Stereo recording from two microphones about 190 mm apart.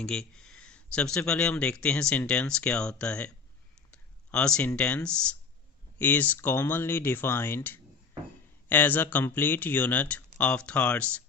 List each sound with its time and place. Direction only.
0.0 s speech: 5° left (ahead or behind)
3.9 s a sound: 5° left (ahead or behind)
4.8 s speech: 5° left (ahead or behind)